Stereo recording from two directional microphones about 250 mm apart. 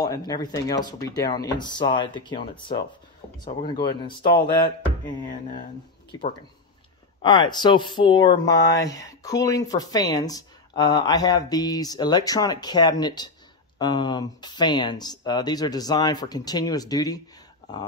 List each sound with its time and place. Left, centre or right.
0.0 s speech: centre
7.2 s speech: centre